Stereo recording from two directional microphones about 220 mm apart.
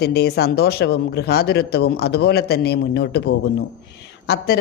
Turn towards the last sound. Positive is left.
turn(degrees=45)  # may be behind; listen again after turning